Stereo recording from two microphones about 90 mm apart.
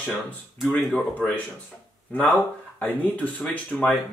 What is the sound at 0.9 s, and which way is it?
Speech, 15° left (ahead or behind).